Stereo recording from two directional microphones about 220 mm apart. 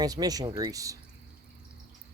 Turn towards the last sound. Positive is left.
turn(degrees=-15)  # may be behind; listen again after turning